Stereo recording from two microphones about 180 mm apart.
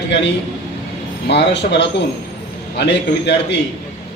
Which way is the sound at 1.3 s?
75° left (ahead or behind).